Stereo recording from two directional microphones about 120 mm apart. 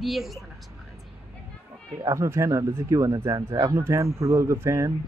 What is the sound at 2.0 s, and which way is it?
Speech, 25° right (ahead or behind).